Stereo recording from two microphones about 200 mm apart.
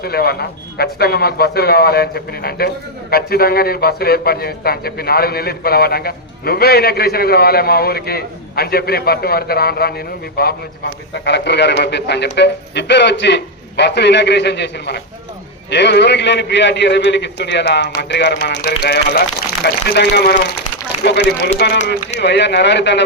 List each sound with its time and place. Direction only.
0.0 s a man's voice: 50° left (ahead or behind)